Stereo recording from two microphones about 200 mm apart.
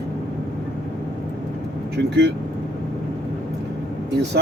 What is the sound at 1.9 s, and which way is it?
Speech, 60° right (ahead or behind).